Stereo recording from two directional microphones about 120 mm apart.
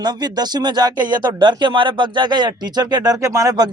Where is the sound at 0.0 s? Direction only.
35° right (ahead or behind).